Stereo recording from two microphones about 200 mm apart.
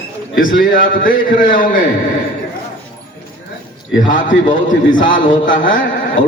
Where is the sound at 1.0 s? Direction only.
40° left (ahead or behind).